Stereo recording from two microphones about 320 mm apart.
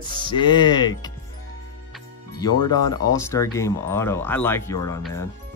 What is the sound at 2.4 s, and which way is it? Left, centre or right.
Speech, centre.